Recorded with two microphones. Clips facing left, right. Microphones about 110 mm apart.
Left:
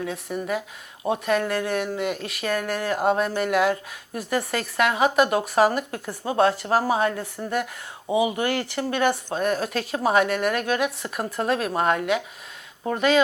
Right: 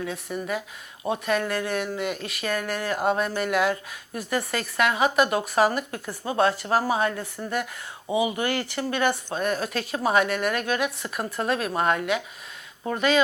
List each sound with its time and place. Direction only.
0.0 s speech: 40° left (ahead or behind)
8.4 s speech: 55° left (ahead or behind)
11.0 s speech: 40° left (ahead or behind); by 13.2 s 55° left (ahead or behind)